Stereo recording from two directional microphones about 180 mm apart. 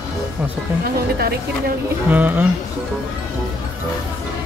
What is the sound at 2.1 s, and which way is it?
Speech, 10° right (ahead or behind).